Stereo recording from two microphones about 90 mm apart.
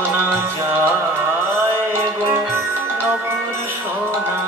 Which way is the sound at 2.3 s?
25° right (ahead or behind).